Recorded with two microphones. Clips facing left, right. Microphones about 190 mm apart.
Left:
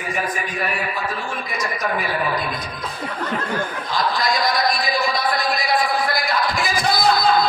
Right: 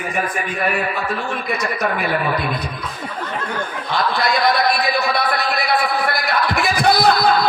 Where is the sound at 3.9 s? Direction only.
65° right (ahead or behind).